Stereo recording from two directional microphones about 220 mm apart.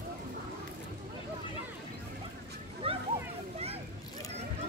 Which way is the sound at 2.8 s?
25° right (ahead or behind).